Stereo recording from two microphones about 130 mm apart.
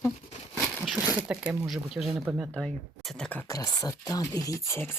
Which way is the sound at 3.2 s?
10° left (ahead or behind).